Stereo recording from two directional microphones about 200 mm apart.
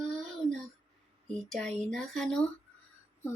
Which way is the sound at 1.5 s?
5° left (ahead or behind).